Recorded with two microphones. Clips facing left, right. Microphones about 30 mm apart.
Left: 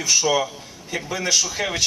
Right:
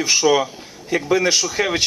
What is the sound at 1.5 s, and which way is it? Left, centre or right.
Speech, centre.